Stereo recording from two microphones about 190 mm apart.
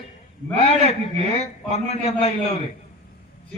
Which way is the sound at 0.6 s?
30° left (ahead or behind).